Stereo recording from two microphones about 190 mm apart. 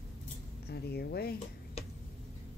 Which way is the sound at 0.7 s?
55° left (ahead or behind).